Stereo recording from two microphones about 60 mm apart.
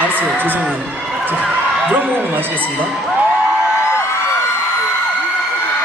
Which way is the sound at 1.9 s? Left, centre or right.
Right.